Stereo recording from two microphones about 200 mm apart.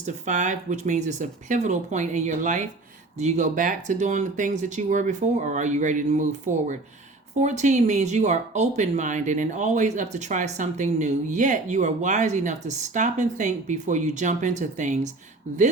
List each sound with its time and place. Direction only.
0.0 s speech: 35° right (ahead or behind)
7.3 s speech: 35° right (ahead or behind)